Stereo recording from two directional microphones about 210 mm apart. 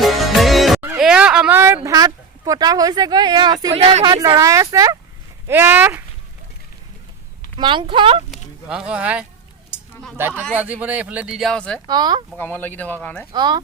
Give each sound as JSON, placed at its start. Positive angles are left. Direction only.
{"t": 0.0, "sound": "music", "side_deg": 0}
{"t": 0.8, "sound": "a sound", "side_deg": -5}
{"t": 3.8, "sound": "speech", "side_deg": -30}
{"t": 7.6, "sound": "speech", "side_deg": -25}
{"t": 8.7, "sound": "speech", "side_deg": -5}
{"t": 11.9, "sound": "speech", "side_deg": -20}
{"t": 12.4, "sound": "speech", "side_deg": 10}
{"t": 13.3, "sound": "speech", "side_deg": -20}